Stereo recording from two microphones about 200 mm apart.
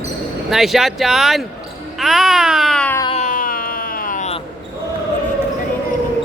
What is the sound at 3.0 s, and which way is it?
Music, 30° left (ahead or behind).